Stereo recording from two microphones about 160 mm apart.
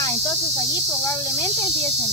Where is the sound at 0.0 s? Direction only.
20° left (ahead or behind).